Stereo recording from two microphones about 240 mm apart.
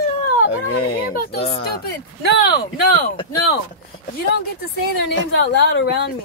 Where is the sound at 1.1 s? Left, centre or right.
Left.